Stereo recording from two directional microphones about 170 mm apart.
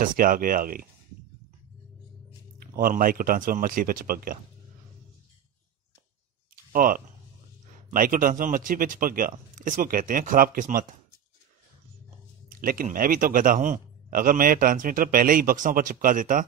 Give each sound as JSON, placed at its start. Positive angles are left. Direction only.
{"t": 0.0, "sound": "speech", "side_deg": -55}
{"t": 2.7, "sound": "speech", "side_deg": -55}
{"t": 6.5, "sound": "a sound", "side_deg": -55}
{"t": 7.9, "sound": "speech", "side_deg": -55}
{"t": 12.4, "sound": "speech", "side_deg": -55}